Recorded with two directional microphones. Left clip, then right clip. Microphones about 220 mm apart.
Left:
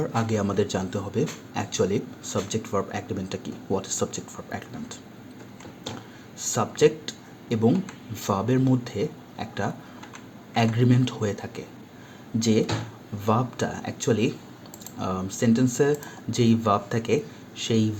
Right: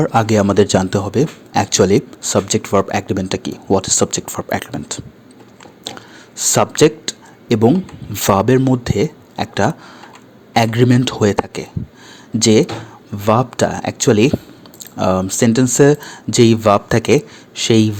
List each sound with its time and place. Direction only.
0.0 s speech: 45° right (ahead or behind)
6.3 s speech: 45° right (ahead or behind)